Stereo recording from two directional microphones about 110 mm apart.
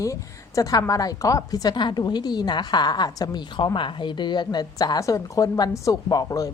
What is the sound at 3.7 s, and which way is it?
A woman's voice, 50° left (ahead or behind).